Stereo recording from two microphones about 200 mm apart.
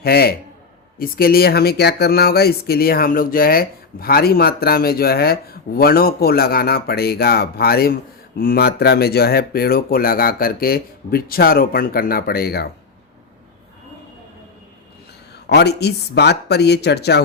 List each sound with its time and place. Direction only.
0.0 s speech: 50° left (ahead or behind)
15.4 s speech: 55° left (ahead or behind)